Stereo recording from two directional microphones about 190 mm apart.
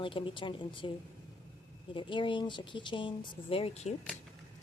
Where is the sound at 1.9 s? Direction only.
25° left (ahead or behind).